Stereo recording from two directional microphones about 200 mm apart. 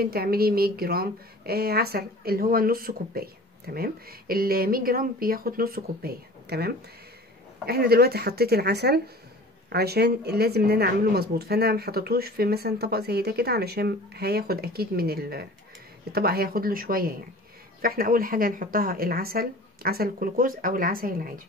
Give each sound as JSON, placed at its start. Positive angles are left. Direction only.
{"t": 0.0, "sound": "a woman's voice", "side_deg": -50}